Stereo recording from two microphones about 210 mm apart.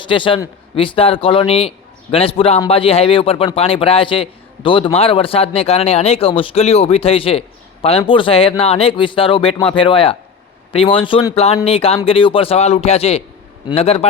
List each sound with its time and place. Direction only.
0.0 s speech: 25° left (ahead or behind)